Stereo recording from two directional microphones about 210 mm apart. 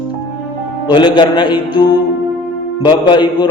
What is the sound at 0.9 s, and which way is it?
Speech, 20° left (ahead or behind).